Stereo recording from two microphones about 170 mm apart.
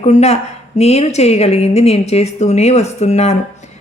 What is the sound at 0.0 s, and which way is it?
A woman's voice, 40° left (ahead or behind).